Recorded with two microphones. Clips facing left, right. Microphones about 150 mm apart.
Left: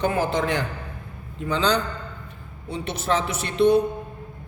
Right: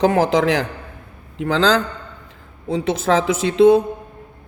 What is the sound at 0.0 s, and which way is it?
A man's voice, 90° right.